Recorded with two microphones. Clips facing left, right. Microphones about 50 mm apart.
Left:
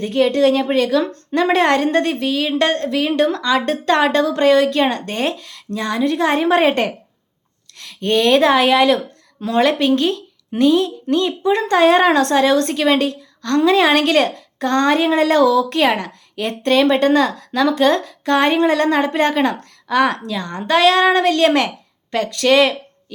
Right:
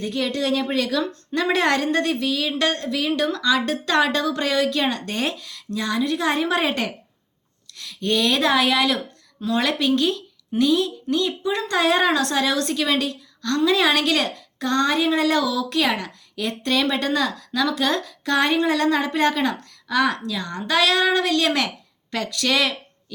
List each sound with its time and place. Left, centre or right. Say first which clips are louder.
0.0 s a woman's voice: left 9 dB; left
1.0 s a woman's voice: left 6 dB; left
1.5 s a woman's voice: left 4 dB; left